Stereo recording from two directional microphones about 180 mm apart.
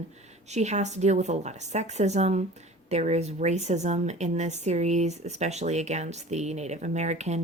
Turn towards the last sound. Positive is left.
turn(degrees=-40)  # may be behind; listen again after turning